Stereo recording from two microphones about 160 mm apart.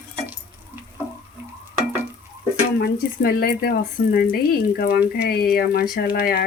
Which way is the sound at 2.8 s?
70° left (ahead or behind).